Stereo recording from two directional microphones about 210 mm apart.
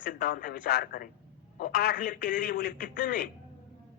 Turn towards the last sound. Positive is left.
turn(degrees=45)  # may be behind; listen again after turning